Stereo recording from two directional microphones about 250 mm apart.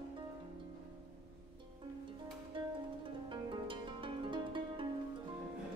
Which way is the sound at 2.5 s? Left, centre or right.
Centre.